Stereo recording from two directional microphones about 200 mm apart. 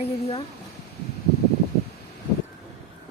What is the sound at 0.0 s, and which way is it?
Speech, 30° left (ahead or behind).